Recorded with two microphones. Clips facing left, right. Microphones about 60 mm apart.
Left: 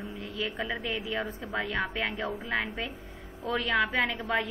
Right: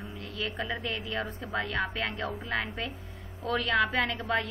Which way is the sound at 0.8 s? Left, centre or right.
Centre.